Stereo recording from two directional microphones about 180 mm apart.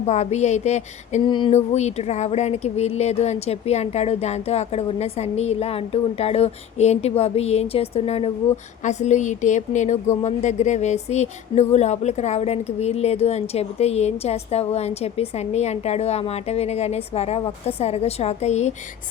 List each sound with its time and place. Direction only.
0.0 s speech: 40° left (ahead or behind)
1.3 s a sound: 25° left (ahead or behind)
1.5 s speech: 40° left (ahead or behind)